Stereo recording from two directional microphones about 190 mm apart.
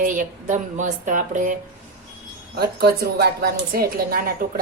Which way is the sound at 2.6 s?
55° right (ahead or behind).